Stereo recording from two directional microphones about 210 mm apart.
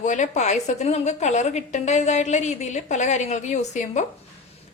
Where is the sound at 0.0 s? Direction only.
35° left (ahead or behind).